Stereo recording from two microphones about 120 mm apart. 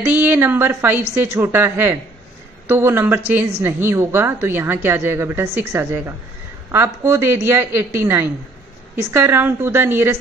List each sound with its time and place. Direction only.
0.0 s a woman's voice: 15° right (ahead or behind)